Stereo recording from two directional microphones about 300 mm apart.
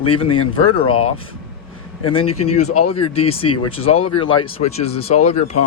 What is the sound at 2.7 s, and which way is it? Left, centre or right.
Speech, left.